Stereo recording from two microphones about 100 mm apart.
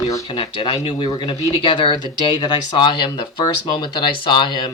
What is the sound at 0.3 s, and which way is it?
Speech, 55° left (ahead or behind).